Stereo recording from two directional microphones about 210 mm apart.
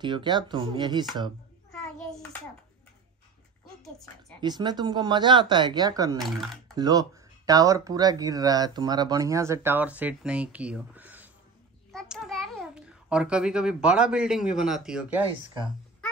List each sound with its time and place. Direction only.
0.0 s speech: 20° right (ahead or behind)
1.7 s child singing: centre (ahead or behind)
3.8 s a woman's voice: centre (ahead or behind)
4.4 s speech: 20° right (ahead or behind)
6.1 s a woman's voice: centre (ahead or behind)
6.7 s a child's voice: 20° right (ahead or behind)